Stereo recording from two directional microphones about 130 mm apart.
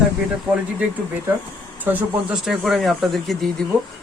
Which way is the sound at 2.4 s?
Centre (ahead or behind).